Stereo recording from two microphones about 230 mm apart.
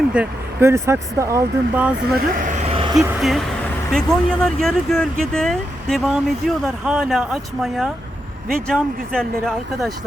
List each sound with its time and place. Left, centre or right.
0.1 s speech: centre
2.1 s vehicle: right
3.0 s speech: centre